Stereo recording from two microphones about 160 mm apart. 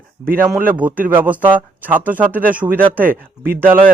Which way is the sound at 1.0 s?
10° right (ahead or behind).